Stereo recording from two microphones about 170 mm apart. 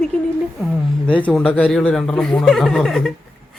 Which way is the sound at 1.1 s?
5° left (ahead or behind).